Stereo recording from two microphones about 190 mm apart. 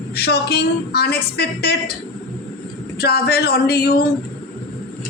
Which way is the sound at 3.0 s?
55° left (ahead or behind).